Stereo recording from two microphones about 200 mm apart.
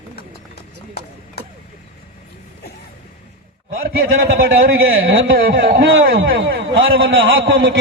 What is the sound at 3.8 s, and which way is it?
Speech, 50° right (ahead or behind).